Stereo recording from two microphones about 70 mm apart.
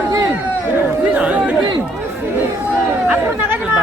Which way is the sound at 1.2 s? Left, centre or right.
Centre.